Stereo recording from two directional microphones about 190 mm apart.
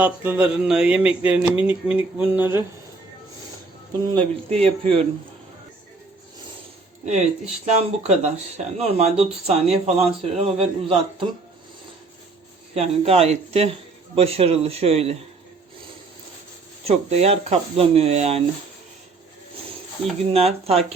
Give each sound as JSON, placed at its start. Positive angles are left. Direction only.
{"t": 0.0, "sound": "a sound", "side_deg": -10}
{"t": 4.5, "sound": "speech", "side_deg": -30}
{"t": 7.0, "sound": "speech", "side_deg": -40}
{"t": 12.7, "sound": "speech", "side_deg": -30}
{"t": 16.8, "sound": "speech", "side_deg": -35}
{"t": 20.3, "sound": "speech", "side_deg": -30}